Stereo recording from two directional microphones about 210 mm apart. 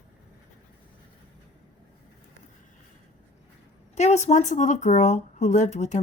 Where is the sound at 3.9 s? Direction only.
35° left (ahead or behind).